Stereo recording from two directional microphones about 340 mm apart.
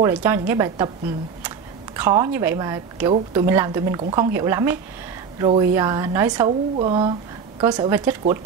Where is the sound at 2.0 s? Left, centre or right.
Centre.